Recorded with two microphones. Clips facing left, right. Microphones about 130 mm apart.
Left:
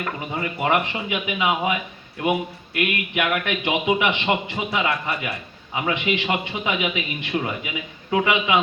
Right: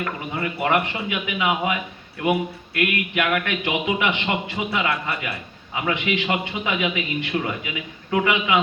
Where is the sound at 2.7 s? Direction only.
20° left (ahead or behind).